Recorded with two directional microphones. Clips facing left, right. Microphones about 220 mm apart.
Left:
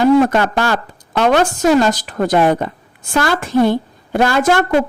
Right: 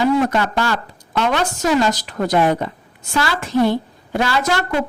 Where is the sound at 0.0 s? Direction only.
50° left (ahead or behind).